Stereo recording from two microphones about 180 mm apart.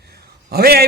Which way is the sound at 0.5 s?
60° right (ahead or behind).